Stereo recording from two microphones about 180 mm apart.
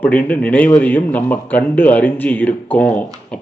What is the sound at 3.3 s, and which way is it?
Beatboxing, 5° left (ahead or behind).